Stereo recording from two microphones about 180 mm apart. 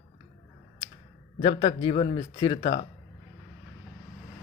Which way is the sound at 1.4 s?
30° left (ahead or behind).